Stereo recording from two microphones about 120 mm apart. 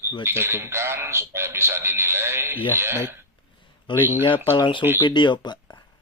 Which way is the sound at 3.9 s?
45° left (ahead or behind).